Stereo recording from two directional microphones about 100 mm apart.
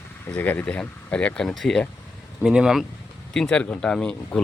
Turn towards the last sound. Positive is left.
turn(degrees=10)  # may be behind; listen again after turning